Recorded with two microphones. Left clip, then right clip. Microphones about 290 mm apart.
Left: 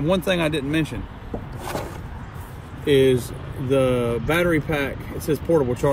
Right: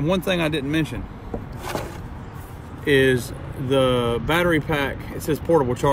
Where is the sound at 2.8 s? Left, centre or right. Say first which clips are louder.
Even; centre.